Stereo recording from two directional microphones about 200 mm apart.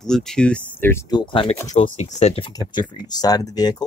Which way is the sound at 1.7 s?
35° left (ahead or behind).